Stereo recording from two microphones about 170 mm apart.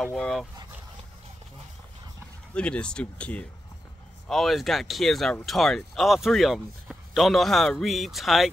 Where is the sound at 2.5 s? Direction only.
5° left (ahead or behind).